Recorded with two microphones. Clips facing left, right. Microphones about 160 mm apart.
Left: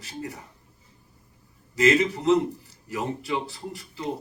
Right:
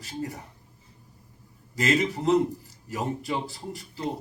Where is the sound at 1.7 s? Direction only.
40° right (ahead or behind).